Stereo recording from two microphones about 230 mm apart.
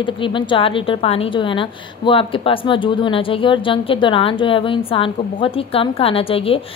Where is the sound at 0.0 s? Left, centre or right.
Left.